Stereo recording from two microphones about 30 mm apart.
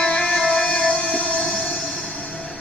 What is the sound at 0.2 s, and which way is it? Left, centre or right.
Music, left.